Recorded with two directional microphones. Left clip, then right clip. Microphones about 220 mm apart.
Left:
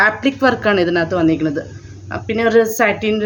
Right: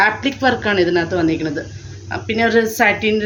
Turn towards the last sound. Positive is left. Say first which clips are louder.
# right 1 dB
turn(degrees=40)  # may be behind; listen again after turning